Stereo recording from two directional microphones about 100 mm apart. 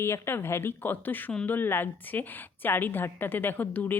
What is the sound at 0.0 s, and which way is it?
A woman's voice, 25° left (ahead or behind).